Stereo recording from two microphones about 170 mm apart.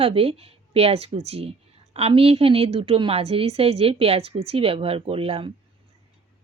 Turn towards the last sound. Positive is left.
turn(degrees=-35)  # may be behind; listen again after turning